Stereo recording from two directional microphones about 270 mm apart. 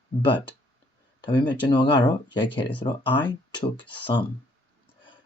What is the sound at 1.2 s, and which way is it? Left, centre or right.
Speech, centre.